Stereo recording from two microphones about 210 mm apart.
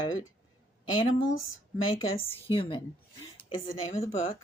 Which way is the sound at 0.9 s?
35° left (ahead or behind).